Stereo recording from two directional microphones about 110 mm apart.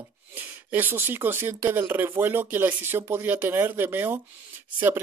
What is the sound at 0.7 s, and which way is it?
Speech, 15° right (ahead or behind).